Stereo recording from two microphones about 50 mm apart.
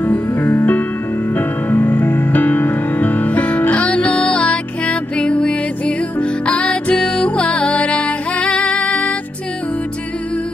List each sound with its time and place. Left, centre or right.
0.0 s music: left